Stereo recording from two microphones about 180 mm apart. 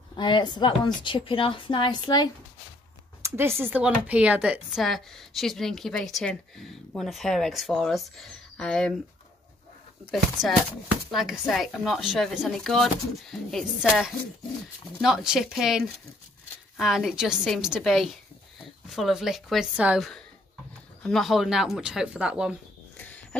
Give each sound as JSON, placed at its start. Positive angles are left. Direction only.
{"t": 0.1, "sound": "a woman's voice", "side_deg": 25}
{"t": 3.2, "sound": "speech", "side_deg": -15}
{"t": 10.1, "sound": "speech", "side_deg": 0}
{"t": 22.9, "sound": "a sound", "side_deg": 10}